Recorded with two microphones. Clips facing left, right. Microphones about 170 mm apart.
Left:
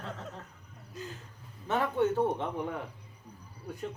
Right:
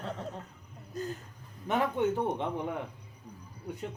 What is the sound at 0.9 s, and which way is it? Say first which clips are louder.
Speech: right 6 dB; 40° right (ahead or behind).